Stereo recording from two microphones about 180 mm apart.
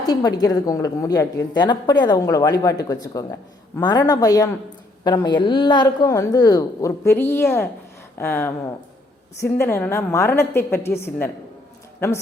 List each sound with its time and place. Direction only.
0.0 s a woman's voice: 20° left (ahead or behind)